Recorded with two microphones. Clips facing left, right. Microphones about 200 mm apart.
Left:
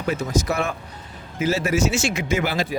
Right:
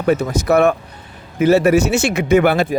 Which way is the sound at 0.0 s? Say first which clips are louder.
Right 6 dB; 60° right (ahead or behind).